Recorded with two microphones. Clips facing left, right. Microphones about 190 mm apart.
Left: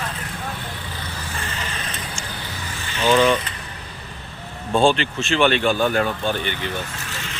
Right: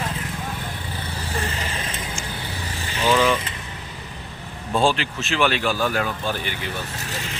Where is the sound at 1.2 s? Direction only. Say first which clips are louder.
Right 5 dB; 35° right (ahead or behind).